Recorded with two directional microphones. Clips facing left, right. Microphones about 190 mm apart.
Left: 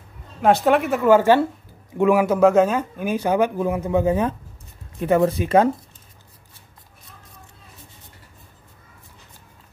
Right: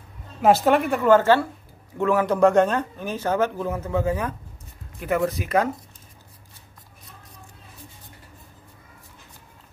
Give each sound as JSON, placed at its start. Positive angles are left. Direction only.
{"t": 0.4, "sound": "a woman's voice", "side_deg": 0}